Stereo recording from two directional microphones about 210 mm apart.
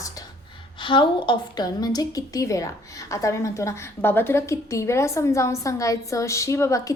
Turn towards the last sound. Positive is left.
turn(degrees=15)  # may be behind; listen again after turning